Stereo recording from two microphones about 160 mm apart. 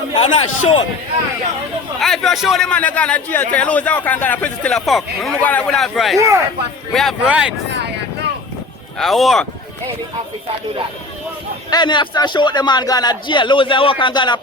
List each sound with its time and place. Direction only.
0.2 s a man's voice: 35° left (ahead or behind)
2.0 s a man's voice: centre (ahead or behind)
9.0 s speech: centre (ahead or behind)
11.7 s a man's voice: 30° left (ahead or behind)